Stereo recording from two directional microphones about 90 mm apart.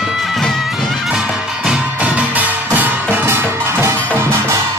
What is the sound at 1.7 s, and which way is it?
Music, 15° right (ahead or behind).